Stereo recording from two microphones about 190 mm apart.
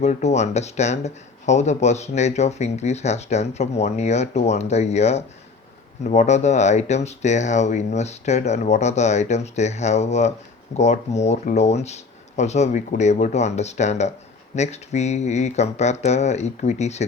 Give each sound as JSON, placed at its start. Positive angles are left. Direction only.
{"t": 0.0, "sound": "speech", "side_deg": 35}